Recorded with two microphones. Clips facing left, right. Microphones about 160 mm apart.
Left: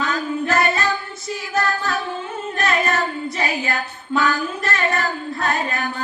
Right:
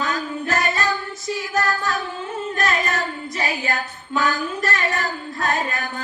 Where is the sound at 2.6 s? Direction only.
35° left (ahead or behind).